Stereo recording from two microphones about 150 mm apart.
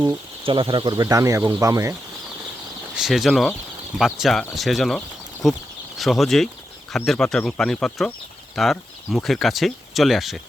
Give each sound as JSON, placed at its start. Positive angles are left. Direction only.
{"t": 0.4, "sound": "speech", "side_deg": -35}
{"t": 1.0, "sound": "speech", "side_deg": -20}
{"t": 2.9, "sound": "speech", "side_deg": 0}